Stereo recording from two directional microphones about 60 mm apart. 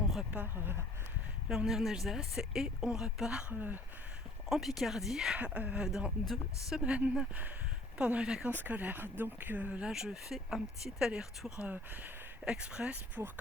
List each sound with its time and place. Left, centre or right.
0.4 s speech: right
1.5 s speech: centre
3.5 s speech: right
4.4 s speech: centre
5.4 s speech: right
6.2 s speech: centre
6.7 s speech: centre
8.4 s speech: right
9.8 s speech: centre
13.1 s speech: right